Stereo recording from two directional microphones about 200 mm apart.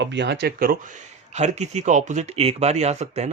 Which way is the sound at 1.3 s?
35° right (ahead or behind).